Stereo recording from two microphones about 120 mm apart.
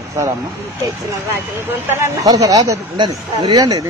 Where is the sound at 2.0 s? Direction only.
30° right (ahead or behind).